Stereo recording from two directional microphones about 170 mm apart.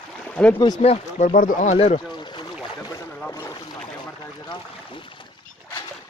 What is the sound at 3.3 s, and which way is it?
Boat, 20° left (ahead or behind).